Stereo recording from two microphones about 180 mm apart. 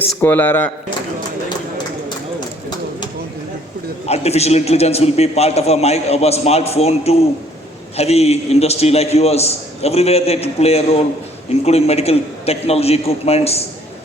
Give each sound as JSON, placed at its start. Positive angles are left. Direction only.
{"t": 0.2, "sound": "speech", "side_deg": 10}
{"t": 4.0, "sound": "a man's voice", "side_deg": 35}